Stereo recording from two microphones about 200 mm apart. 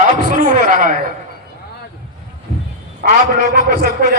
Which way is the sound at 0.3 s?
40° right (ahead or behind).